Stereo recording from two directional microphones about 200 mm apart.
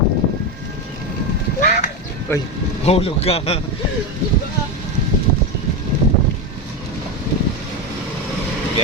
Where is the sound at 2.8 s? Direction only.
30° left (ahead or behind).